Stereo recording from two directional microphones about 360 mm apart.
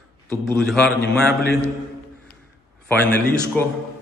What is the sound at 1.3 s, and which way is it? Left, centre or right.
Speech, left.